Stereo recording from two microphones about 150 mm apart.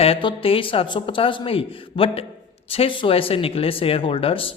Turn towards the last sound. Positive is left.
turn(degrees=35)  # may be behind; listen again after turning